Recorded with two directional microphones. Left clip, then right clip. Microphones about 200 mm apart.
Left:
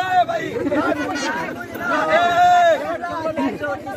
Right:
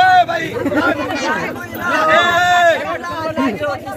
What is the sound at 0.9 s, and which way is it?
Speech, 60° left (ahead or behind).